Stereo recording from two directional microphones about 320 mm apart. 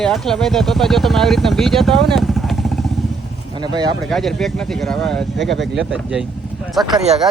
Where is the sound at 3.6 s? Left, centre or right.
Centre.